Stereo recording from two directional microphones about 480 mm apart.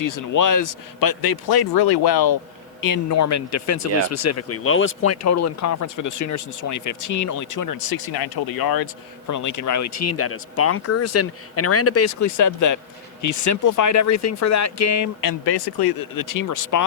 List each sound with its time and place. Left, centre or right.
0.0 s a man's voice: left
2.8 s speech: left